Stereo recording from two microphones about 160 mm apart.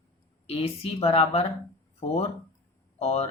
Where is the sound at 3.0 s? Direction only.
40° left (ahead or behind).